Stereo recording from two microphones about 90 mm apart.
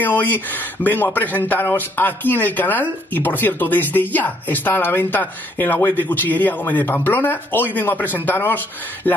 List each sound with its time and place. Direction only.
0.0 s speech: 20° left (ahead or behind)